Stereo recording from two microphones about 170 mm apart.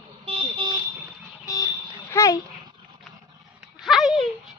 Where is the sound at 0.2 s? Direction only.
30° right (ahead or behind).